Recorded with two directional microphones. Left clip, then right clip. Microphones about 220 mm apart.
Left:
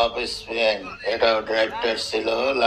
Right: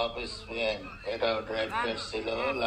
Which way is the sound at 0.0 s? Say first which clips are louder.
Left 10 dB; 30° left (ahead or behind).